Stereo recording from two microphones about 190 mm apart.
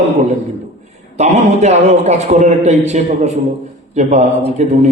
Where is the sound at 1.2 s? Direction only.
35° right (ahead or behind).